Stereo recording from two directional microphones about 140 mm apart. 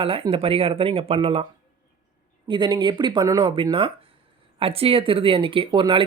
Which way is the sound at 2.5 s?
35° right (ahead or behind).